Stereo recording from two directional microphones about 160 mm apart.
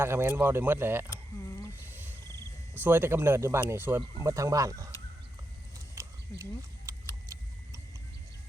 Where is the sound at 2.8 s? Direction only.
10° right (ahead or behind).